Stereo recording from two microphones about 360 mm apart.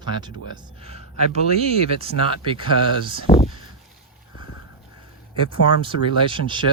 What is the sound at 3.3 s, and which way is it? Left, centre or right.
Speech, centre.